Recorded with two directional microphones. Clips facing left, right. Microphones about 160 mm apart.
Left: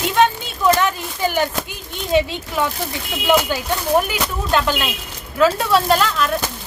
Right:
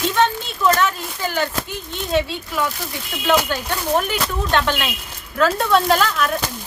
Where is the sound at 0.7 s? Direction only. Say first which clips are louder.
Left 3 dB; 15° left (ahead or behind).